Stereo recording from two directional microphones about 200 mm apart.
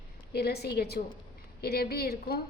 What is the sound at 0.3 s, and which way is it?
A woman's voice, 55° left (ahead or behind).